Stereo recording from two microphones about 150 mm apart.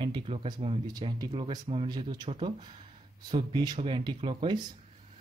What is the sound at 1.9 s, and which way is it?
Speech, 30° right (ahead or behind).